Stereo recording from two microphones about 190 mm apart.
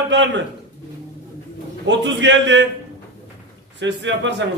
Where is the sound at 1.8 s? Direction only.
70° right (ahead or behind).